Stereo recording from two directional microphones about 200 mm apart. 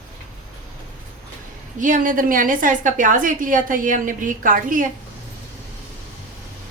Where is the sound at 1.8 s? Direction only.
40° right (ahead or behind).